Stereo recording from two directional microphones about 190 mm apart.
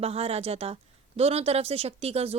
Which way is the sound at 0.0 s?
30° right (ahead or behind).